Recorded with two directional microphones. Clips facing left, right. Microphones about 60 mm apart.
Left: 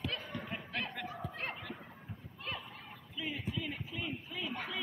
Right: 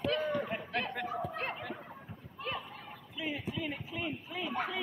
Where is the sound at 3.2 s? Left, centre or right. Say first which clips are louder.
Right 2 dB; centre.